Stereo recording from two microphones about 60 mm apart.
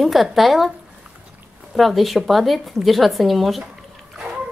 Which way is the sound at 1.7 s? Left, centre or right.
Centre.